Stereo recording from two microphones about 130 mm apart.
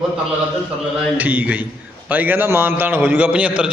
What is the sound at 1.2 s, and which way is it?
A man's voice, 10° right (ahead or behind).